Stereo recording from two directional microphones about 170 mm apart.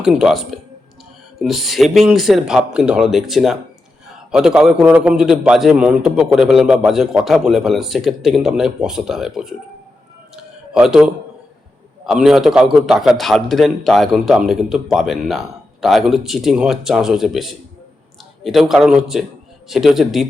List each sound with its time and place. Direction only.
0.0 s a man's voice: centre (ahead or behind)
10.3 s a sound: 5° right (ahead or behind)
12.0 s a man's voice: centre (ahead or behind)